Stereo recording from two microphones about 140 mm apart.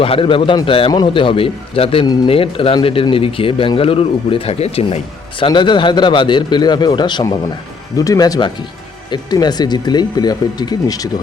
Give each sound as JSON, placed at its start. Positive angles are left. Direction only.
{"t": 0.0, "sound": "speech", "side_deg": 40}